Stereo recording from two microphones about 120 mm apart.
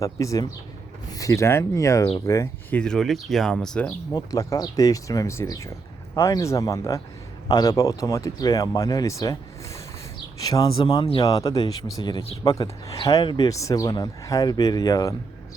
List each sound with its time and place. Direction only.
0.0 s speech: 25° left (ahead or behind)
2.7 s speech: 5° left (ahead or behind)
4.1 s speech: 30° left (ahead or behind)
13.2 s speech: 40° left (ahead or behind)
13.5 s speech: 30° left (ahead or behind)